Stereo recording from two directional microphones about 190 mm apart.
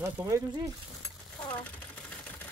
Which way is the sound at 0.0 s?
15° right (ahead or behind).